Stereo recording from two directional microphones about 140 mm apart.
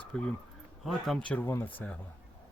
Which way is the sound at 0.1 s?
5° left (ahead or behind).